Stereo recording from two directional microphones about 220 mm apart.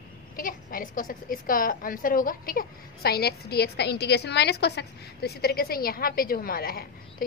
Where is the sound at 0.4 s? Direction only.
40° left (ahead or behind).